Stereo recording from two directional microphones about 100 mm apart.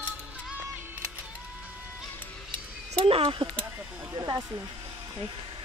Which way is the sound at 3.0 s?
70° right (ahead or behind).